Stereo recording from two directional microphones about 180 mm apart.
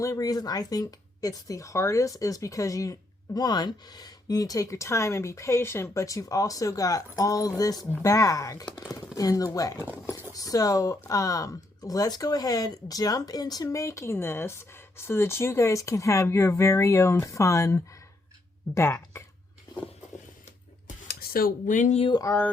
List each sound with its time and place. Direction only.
0.0 s speech: 20° left (ahead or behind)
20.8 s a sound: 55° left (ahead or behind); by 22.1 s 40° left (ahead or behind)
22.1 s speech: 15° left (ahead or behind)